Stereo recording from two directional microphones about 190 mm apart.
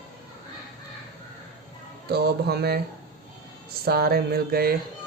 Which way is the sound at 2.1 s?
60° right (ahead or behind).